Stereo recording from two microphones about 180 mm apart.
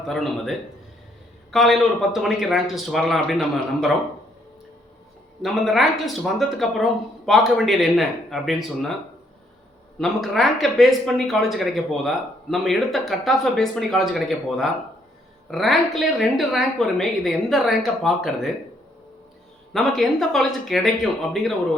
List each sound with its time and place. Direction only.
0.1 s speech: centre (ahead or behind)
5.4 s speech: centre (ahead or behind)
10.0 s speech: centre (ahead or behind)
19.7 s speech: centre (ahead or behind)